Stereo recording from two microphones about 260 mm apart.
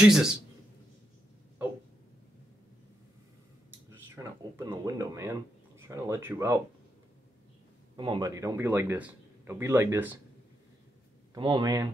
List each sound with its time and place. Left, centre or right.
0.0 s a man's voice: centre
4.1 s speech: centre
7.9 s a man's voice: centre
11.3 s a man's voice: centre